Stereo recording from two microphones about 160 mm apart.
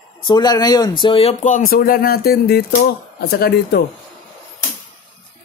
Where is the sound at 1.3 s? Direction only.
50° left (ahead or behind).